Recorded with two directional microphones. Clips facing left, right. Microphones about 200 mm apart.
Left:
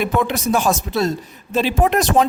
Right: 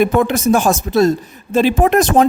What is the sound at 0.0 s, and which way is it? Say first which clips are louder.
Speech: right 6 dB; 50° right (ahead or behind).